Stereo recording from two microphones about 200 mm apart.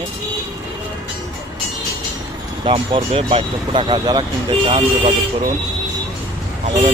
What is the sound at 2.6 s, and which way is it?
Speech, 25° right (ahead or behind).